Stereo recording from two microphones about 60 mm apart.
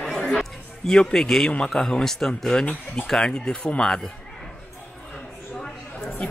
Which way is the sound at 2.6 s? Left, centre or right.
Left.